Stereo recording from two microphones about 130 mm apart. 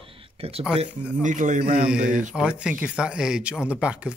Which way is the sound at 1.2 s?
75° right (ahead or behind).